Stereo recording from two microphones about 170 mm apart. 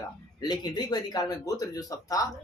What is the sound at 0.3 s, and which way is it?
A woman's voice, 25° left (ahead or behind).